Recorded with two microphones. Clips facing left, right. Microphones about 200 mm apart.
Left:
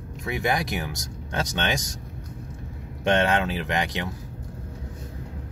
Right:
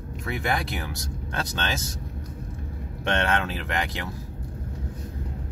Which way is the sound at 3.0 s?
20° left (ahead or behind).